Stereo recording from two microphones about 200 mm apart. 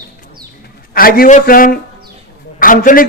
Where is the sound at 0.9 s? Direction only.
45° left (ahead or behind).